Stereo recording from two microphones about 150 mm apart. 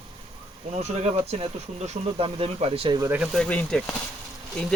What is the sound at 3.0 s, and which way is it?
Speech, 10° right (ahead or behind).